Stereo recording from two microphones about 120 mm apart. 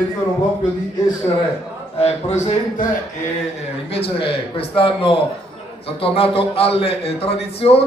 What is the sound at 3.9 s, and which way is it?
A man's voice, 50° left (ahead or behind).